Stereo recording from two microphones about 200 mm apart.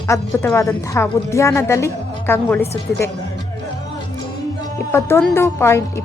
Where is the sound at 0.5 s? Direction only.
15° left (ahead or behind).